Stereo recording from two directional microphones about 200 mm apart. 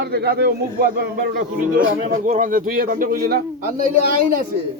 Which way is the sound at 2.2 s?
40° right (ahead or behind).